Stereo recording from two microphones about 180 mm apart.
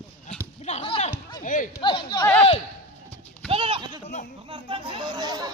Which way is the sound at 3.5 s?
30° right (ahead or behind).